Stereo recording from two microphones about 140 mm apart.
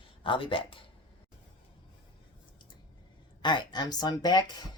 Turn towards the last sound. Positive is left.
turn(degrees=30)  # may be behind; listen again after turning